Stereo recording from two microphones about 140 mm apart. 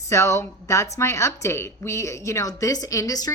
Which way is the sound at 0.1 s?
20° left (ahead or behind).